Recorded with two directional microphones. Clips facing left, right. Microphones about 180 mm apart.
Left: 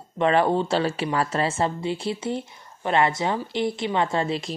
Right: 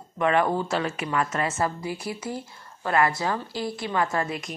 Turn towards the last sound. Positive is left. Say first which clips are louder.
# left 3 dB
turn(degrees=25)  # may be behind; listen again after turning